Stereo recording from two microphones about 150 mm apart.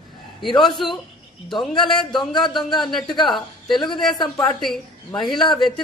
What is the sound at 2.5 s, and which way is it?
Speech, 30° left (ahead or behind).